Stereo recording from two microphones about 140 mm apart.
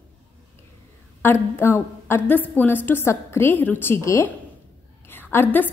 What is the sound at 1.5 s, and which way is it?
A woman's voice, 15° left (ahead or behind).